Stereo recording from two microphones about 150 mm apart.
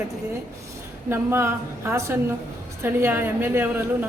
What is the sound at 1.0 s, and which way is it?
A woman's voice, 15° right (ahead or behind).